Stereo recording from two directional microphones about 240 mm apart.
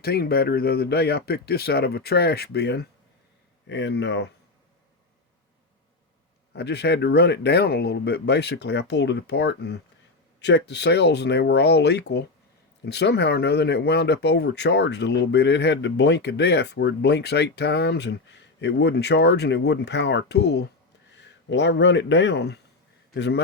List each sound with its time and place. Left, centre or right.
0.0 s speech: left
6.5 s speech: left